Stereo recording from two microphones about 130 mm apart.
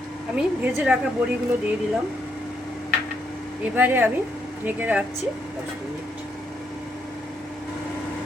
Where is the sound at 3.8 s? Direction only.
15° right (ahead or behind).